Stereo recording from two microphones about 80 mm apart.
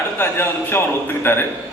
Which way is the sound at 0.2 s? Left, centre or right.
Left.